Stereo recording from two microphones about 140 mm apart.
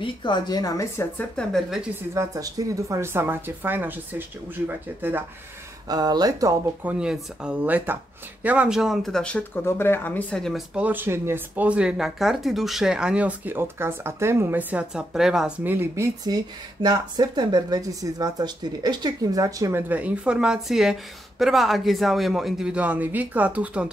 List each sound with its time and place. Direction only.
0.0 s speech: 35° left (ahead or behind)
1.1 s speech: 5° left (ahead or behind)
2.1 s speech: 25° right (ahead or behind)
5.9 s speech: 30° right (ahead or behind)
6.8 s speech: 10° right (ahead or behind)
9.7 s speech: 15° left (ahead or behind)
10.7 s speech: 10° right (ahead or behind)
16.3 s speech: 30° right (ahead or behind)
19.9 s speech: 10° right (ahead or behind)